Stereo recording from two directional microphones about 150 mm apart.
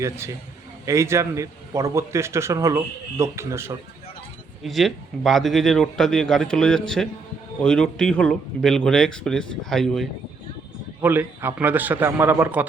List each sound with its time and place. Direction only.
0.0 s a man's voice: 20° right (ahead or behind)
4.6 s a man's voice: centre (ahead or behind)
11.0 s a man's voice: 15° right (ahead or behind)